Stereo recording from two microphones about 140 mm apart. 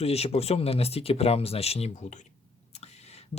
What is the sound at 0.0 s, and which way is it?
Speech, 45° left (ahead or behind).